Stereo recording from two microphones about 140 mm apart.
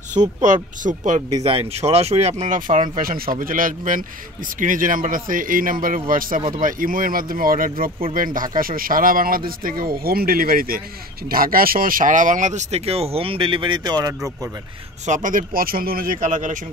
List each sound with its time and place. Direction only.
0.4 s speech: 65° right (ahead or behind)
1.4 s speech: 45° right (ahead or behind)
3.0 s a man's voice: 90° right; by 14.5 s 25° right (ahead or behind)
15.0 s a man's voice: 65° right (ahead or behind)